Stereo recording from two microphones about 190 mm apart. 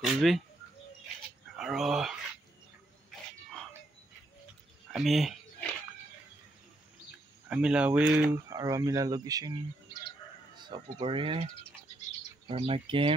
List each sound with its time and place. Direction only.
0.0 s speech: centre (ahead or behind)
1.6 s speech: centre (ahead or behind)
4.9 s a sound: centre (ahead or behind)
7.4 s speech: 5° right (ahead or behind)
8.5 s speech: 20° right (ahead or behind)
10.5 s speech: 25° right (ahead or behind)
12.4 s speech: 30° right (ahead or behind)